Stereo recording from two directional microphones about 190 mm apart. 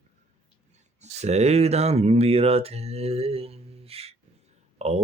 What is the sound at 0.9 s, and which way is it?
Speech, 35° right (ahead or behind).